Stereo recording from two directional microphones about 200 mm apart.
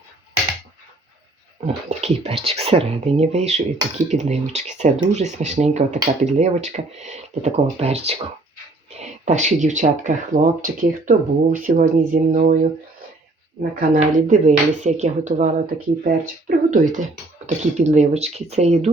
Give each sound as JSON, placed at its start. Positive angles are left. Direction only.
{"t": 1.6, "sound": "speech", "side_deg": -30}